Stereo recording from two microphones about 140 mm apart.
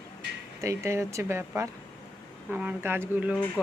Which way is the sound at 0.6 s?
20° right (ahead or behind).